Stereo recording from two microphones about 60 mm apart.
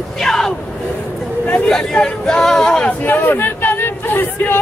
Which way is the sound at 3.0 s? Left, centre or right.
Left.